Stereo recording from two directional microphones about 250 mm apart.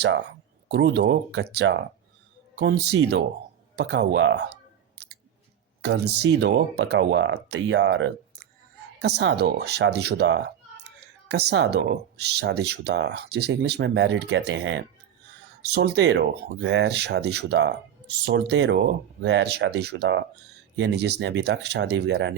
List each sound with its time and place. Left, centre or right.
0.0 s speech: right
5.8 s speech: right